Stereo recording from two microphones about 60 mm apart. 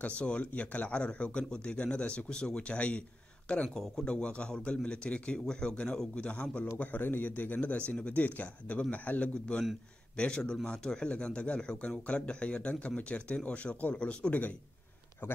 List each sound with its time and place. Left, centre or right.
0.0 s speech: left
3.6 s speech: centre
4.0 s a man's voice: centre
15.2 s speech: left